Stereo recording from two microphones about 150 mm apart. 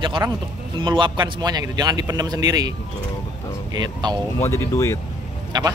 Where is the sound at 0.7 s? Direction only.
30° right (ahead or behind).